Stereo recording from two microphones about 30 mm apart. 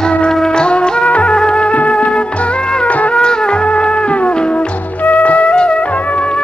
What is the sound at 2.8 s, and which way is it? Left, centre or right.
Music, left.